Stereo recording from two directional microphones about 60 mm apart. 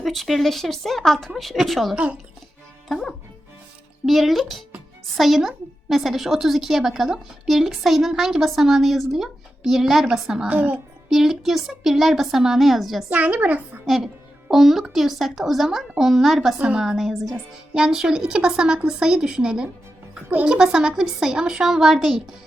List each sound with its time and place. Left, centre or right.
0.0 s a woman's voice: centre
10.5 s a woman's voice: right
11.1 s a woman's voice: centre
13.1 s a woman's voice: right
13.8 s a woman's voice: centre
16.6 s speech: centre
16.8 s a woman's voice: centre